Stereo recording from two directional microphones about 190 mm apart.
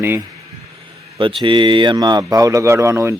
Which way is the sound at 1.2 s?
25° right (ahead or behind).